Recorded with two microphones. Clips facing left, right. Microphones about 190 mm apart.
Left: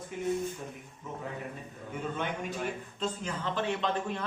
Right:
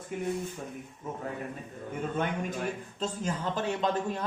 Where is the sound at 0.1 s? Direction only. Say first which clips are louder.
Right 2 dB; 50° right (ahead or behind).